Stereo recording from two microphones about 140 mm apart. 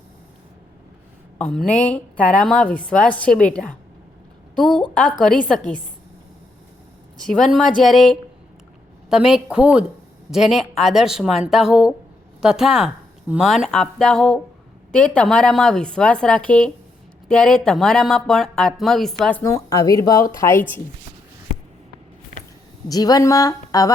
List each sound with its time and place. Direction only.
1.4 s a woman's voice: 10° left (ahead or behind)
7.3 s a woman's voice: centre (ahead or behind)
19.4 s a woman's voice: 25° left (ahead or behind)
22.9 s a woman's voice: 25° left (ahead or behind)